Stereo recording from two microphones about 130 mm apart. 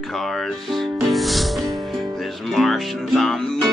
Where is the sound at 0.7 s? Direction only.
Centre (ahead or behind).